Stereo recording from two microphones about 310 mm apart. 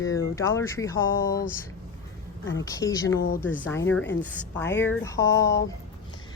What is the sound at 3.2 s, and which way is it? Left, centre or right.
Speech, left.